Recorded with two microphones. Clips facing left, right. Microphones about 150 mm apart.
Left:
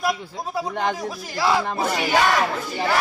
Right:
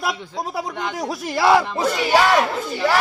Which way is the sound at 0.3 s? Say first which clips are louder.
Even; 80° right.